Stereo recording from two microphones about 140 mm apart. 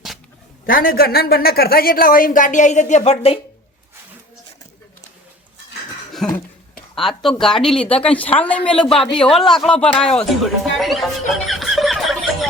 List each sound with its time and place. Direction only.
0.6 s a woman's voice: 90° left; by 3.4 s 50° left (ahead or behind)
6.2 s a sound: 5° left (ahead or behind)
6.9 s a woman's voice: centre (ahead or behind)